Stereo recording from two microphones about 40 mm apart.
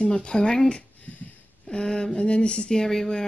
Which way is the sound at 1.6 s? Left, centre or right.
Centre.